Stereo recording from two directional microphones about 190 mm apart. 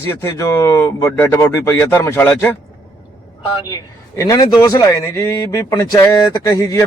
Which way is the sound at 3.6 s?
20° left (ahead or behind).